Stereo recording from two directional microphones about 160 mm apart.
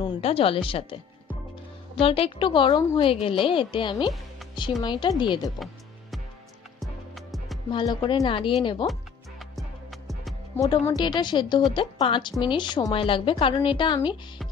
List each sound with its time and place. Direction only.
0.0 s a woman's voice: 35° left (ahead or behind)
2.0 s a woman's voice: 35° left (ahead or behind)
6.8 s music: centre (ahead or behind)
7.7 s a woman's voice: 30° left (ahead or behind)
9.4 s music: centre (ahead or behind)
10.6 s a woman's voice: 25° left (ahead or behind)